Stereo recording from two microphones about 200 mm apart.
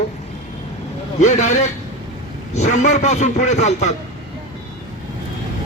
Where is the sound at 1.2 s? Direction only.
35° left (ahead or behind).